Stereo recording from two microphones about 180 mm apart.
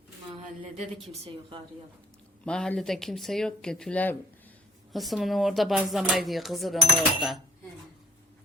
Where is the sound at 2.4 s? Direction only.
5° left (ahead or behind).